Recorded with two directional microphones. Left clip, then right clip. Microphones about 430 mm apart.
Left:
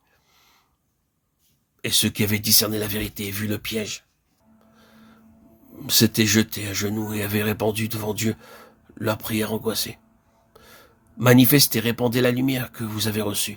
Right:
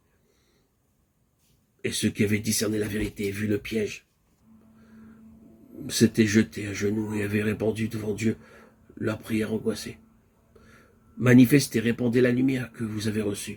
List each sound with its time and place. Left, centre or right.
1.8 s speech: left
5.8 s speech: left
11.2 s speech: left